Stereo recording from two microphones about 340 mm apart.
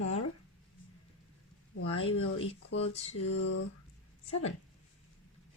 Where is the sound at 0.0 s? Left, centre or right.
Left.